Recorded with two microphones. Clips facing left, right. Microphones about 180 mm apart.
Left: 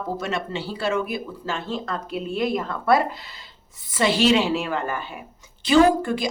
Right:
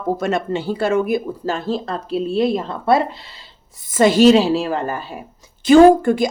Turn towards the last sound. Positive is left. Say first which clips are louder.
# right 7 dB
turn(degrees=-50)  # may be behind; listen again after turning